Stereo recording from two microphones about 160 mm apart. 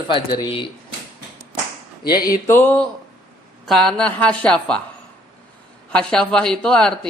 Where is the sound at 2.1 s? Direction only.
20° left (ahead or behind).